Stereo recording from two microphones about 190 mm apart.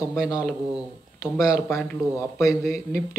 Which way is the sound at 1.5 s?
15° left (ahead or behind).